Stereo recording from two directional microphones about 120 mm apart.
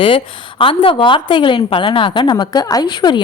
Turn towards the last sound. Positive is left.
turn(degrees=40)  # may be behind; listen again after turning